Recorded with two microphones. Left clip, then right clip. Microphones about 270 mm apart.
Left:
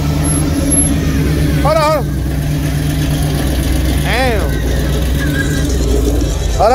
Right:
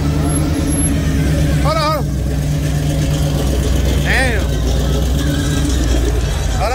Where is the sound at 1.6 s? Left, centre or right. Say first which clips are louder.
Left 5 dB; centre.